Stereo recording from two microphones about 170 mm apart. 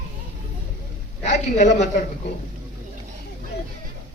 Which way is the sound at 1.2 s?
45° left (ahead or behind).